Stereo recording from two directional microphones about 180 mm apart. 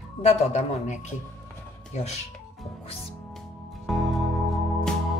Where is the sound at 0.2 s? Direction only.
35° left (ahead or behind).